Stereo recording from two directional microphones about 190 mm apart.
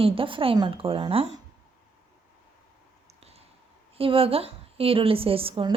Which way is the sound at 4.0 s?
30° right (ahead or behind).